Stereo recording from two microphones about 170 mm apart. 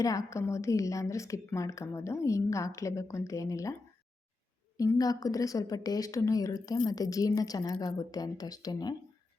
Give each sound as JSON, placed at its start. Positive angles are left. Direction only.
{"t": 0.0, "sound": "a woman's voice", "side_deg": 20}
{"t": 4.8, "sound": "a woman's voice", "side_deg": 20}